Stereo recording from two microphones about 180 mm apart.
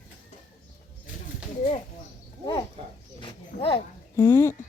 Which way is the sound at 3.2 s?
30° left (ahead or behind).